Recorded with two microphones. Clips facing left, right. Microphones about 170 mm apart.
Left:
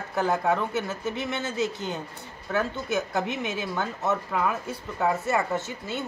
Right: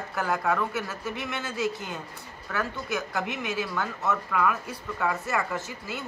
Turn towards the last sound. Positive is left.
turn(degrees=25)  # may be behind; listen again after turning